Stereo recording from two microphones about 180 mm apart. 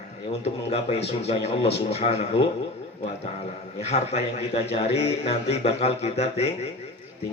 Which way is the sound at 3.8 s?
35° left (ahead or behind).